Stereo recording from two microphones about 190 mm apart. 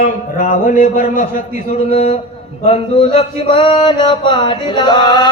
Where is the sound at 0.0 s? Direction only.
40° left (ahead or behind).